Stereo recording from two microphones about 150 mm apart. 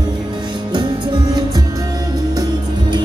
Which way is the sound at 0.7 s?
30° right (ahead or behind).